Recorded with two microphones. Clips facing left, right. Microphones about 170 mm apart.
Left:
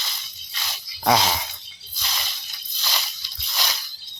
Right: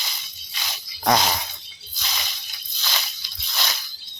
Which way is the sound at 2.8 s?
5° left (ahead or behind).